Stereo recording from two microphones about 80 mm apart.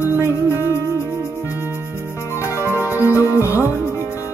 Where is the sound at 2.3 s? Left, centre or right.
Left.